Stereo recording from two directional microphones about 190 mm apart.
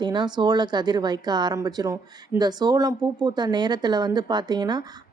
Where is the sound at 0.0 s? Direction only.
25° right (ahead or behind).